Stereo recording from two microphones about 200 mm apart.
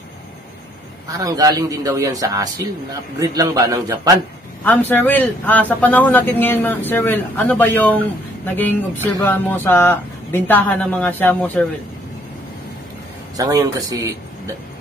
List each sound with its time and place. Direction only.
1.0 s a man's voice: 15° right (ahead or behind)
4.6 s speech: 10° left (ahead or behind)
13.4 s a man's voice: 20° right (ahead or behind)